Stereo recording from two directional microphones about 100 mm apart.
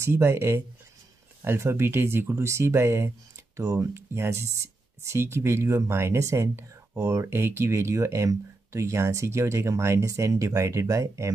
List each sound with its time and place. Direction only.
0.0 s speech: 25° right (ahead or behind)